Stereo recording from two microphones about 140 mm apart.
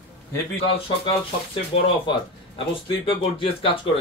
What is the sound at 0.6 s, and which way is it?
Speech, 45° left (ahead or behind).